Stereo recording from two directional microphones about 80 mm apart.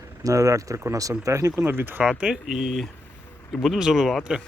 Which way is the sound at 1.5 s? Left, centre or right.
Right.